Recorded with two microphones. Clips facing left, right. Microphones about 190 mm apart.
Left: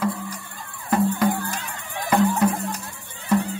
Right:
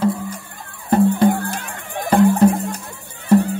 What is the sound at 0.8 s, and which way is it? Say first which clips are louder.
Music: right 6 dB; 30° right (ahead or behind).